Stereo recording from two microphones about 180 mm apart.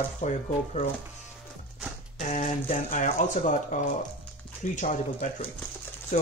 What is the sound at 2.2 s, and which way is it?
Speech, 40° left (ahead or behind).